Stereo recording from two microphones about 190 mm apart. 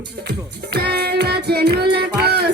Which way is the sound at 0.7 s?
60° right (ahead or behind).